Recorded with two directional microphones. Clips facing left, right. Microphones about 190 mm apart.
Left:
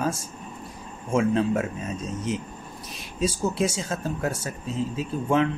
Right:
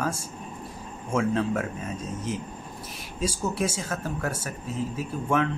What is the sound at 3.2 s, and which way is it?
Speech, 25° left (ahead or behind).